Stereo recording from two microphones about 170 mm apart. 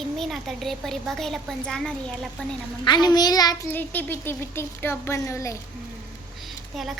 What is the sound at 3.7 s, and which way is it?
Speech, 10° left (ahead or behind).